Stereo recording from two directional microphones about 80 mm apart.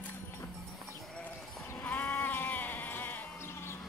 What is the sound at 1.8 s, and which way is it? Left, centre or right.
Sheep, left.